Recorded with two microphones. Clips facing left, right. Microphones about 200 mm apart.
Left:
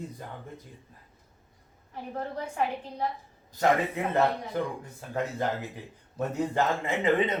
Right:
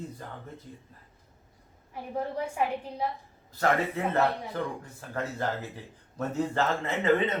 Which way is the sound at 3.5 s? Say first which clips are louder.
Left 2 dB; 15° left (ahead or behind).